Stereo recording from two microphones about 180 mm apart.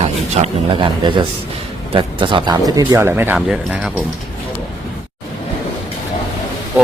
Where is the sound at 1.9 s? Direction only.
30° right (ahead or behind); by 3.9 s centre (ahead or behind).